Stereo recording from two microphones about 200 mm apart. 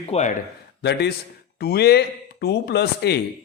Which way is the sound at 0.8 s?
55° left (ahead or behind).